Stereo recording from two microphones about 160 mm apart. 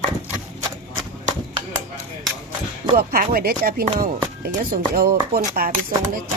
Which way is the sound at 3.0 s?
70° right (ahead or behind).